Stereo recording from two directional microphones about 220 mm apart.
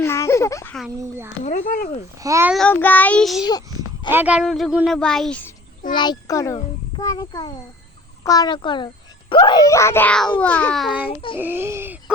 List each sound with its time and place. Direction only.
0.0 s a sound: 10° left (ahead or behind)
1.5 s speech: 35° left (ahead or behind)
2.1 s speech: 15° right (ahead or behind)
2.5 s speech: 5° left (ahead or behind)
5.9 s a child's voice: 20° left (ahead or behind); by 11.0 s centre (ahead or behind)
11.0 s a child's voice: 25° left (ahead or behind)
11.3 s speech: 10° right (ahead or behind)